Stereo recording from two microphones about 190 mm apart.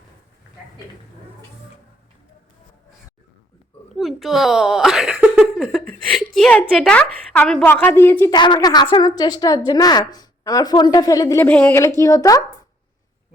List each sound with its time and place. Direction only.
3.9 s a woman's voice: centre (ahead or behind); by 12.4 s 20° left (ahead or behind)